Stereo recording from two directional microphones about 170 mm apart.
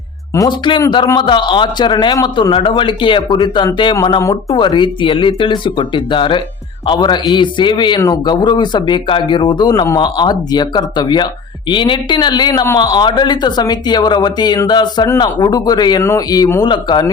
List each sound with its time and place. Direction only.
0.3 s a man's voice: 25° left (ahead or behind)